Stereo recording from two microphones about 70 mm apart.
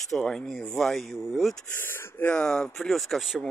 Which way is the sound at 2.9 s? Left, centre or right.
Centre.